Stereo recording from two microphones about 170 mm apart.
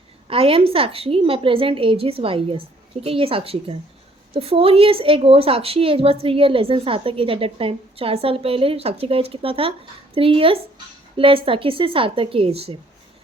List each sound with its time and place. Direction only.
0.3 s a woman's voice: 35° right (ahead or behind)